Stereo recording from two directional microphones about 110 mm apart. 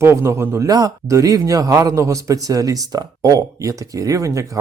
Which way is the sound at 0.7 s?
35° right (ahead or behind).